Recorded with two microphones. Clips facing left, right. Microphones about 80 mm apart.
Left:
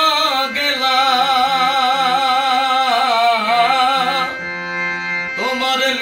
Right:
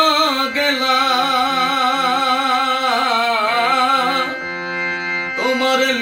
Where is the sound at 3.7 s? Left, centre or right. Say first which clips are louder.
Left 1 dB; right.